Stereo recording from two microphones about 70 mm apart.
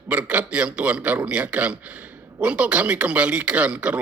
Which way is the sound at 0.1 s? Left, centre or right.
Centre.